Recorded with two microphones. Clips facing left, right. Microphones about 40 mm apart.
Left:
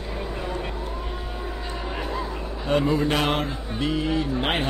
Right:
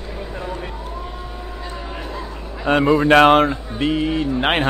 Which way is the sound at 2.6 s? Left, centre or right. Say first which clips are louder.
Right 7 dB; right.